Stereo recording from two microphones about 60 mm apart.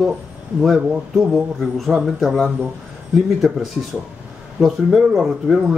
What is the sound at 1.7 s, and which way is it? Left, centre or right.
Speech, centre.